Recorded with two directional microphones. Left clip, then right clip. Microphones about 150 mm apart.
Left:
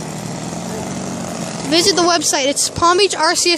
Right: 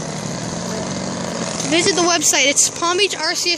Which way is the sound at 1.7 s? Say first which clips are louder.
Left 3 dB; 10° left (ahead or behind).